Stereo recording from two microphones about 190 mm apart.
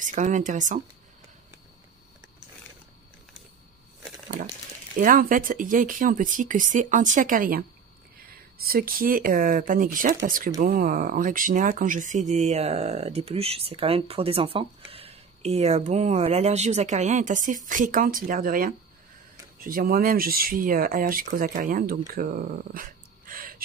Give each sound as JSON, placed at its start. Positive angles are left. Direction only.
{"t": 0.0, "sound": "speech", "side_deg": -40}
{"t": 4.9, "sound": "speech", "side_deg": -45}